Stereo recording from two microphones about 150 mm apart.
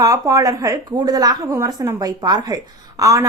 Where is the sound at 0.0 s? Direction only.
20° right (ahead or behind).